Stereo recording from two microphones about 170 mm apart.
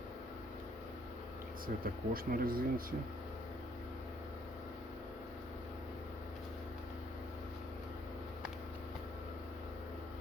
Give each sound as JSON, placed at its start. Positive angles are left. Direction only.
{"t": 1.6, "sound": "speech", "side_deg": -55}